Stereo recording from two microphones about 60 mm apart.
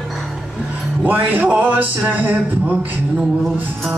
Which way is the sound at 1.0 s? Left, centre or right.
Right.